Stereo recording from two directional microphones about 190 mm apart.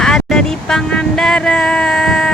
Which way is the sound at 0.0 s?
5° left (ahead or behind).